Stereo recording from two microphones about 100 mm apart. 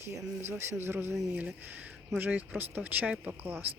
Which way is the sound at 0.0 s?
25° right (ahead or behind).